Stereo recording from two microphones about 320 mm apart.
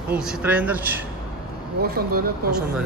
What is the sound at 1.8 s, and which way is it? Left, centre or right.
Speech, right.